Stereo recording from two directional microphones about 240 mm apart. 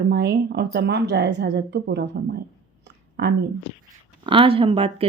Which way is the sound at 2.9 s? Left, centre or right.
Right.